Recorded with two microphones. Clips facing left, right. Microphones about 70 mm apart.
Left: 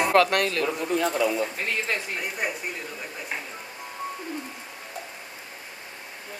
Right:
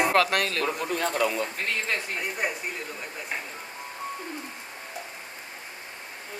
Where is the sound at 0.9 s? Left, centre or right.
Right.